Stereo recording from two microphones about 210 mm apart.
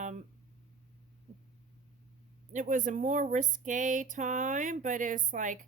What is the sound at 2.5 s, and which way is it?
Speech, 35° right (ahead or behind).